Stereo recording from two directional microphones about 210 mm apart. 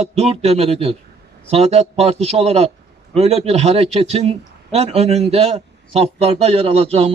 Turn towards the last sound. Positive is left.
turn(degrees=-30)  # may be behind; listen again after turning